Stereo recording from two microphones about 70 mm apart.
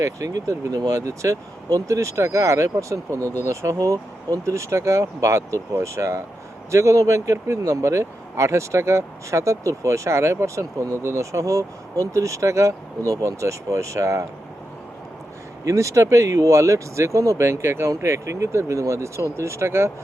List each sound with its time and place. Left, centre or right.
0.0 s speech: right
15.6 s speech: right